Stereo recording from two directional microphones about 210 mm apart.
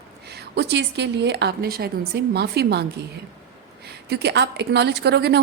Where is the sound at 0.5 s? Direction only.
55° right (ahead or behind).